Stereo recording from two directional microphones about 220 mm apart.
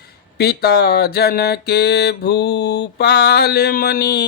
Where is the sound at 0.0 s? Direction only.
45° left (ahead or behind).